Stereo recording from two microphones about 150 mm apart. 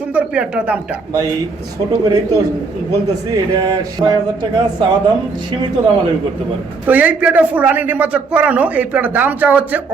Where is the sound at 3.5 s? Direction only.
25° right (ahead or behind).